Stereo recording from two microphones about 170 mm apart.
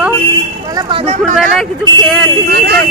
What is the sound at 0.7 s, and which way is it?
Speech, 35° right (ahead or behind).